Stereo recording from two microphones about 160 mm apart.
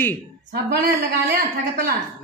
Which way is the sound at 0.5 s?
90° right.